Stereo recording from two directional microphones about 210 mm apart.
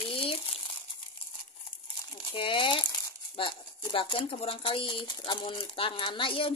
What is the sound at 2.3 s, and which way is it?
Speech, 25° left (ahead or behind).